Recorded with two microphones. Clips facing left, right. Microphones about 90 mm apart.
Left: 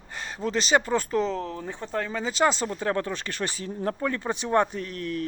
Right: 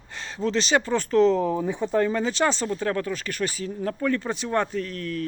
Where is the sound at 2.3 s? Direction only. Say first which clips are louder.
Even; 10° left (ahead or behind).